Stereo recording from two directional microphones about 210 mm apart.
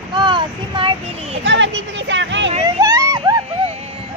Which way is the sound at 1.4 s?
60° right (ahead or behind).